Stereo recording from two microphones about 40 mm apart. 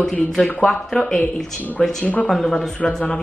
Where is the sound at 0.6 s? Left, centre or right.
Centre.